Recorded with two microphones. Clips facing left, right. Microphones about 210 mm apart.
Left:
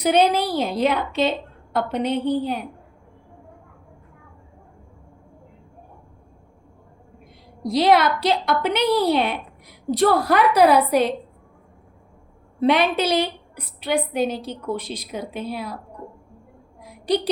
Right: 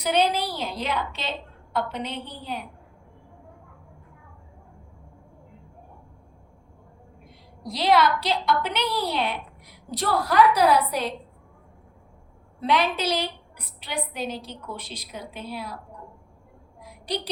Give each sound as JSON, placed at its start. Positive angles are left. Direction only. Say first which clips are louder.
{"t": 0.0, "sound": "a woman's voice", "louder": "left 5 dB", "side_deg": 50}
{"t": 7.7, "sound": "a woman's voice", "louder": "left 4 dB", "side_deg": 50}
{"t": 12.5, "sound": "a woman's voice", "louder": "left 6 dB", "side_deg": 60}